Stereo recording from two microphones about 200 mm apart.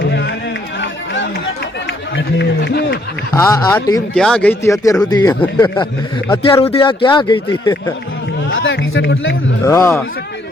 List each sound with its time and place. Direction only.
0.1 s music: 60° left (ahead or behind)
0.8 s run: 65° left (ahead or behind)
2.1 s speech: 60° left (ahead or behind)
3.3 s speech: 15° left (ahead or behind)
4.1 s speech: 5° left (ahead or behind)
5.7 s speech: 25° left (ahead or behind)
8.4 s speech: 70° left (ahead or behind)
9.6 s speech: 15° left (ahead or behind)